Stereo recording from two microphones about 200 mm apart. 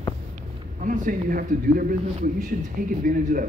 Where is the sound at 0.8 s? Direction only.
40° right (ahead or behind).